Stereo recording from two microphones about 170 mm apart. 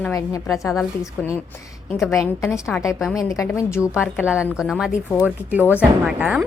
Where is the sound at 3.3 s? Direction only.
15° left (ahead or behind).